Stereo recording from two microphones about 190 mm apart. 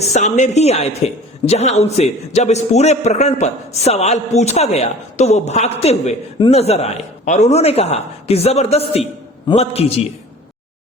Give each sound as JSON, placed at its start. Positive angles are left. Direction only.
{"t": 0.0, "sound": "a woman's voice", "side_deg": 35}